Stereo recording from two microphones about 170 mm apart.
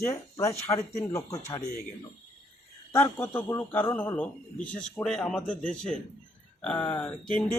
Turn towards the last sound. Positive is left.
turn(degrees=10)  # may be behind; listen again after turning